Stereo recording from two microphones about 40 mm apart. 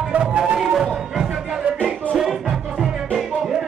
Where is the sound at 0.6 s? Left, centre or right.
Centre.